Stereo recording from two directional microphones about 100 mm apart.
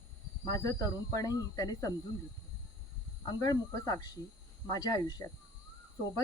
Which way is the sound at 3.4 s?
35° left (ahead or behind).